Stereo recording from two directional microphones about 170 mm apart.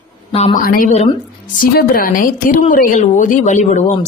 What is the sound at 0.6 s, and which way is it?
A woman's voice, 55° left (ahead or behind).